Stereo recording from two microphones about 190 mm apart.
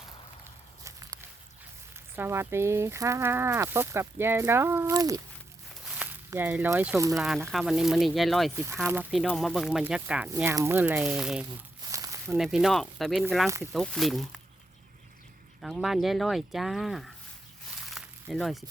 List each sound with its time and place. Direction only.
0.9 s walk: 15° right (ahead or behind)
2.1 s speech: 10° right (ahead or behind)
5.8 s speech: 5° right (ahead or behind)
7.2 s speech: centre (ahead or behind)
8.5 s speech: 15° right (ahead or behind)
11.9 s a sound: 15° right (ahead or behind)
12.3 s speech: 5° right (ahead or behind)
15.6 s speech: centre (ahead or behind)
17.9 s a sound: centre (ahead or behind)